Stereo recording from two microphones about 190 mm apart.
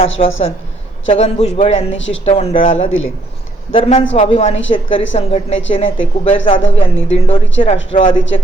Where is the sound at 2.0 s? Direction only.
80° left.